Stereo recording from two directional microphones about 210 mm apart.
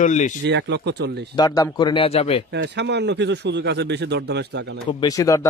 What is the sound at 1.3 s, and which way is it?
Speech, 20° left (ahead or behind).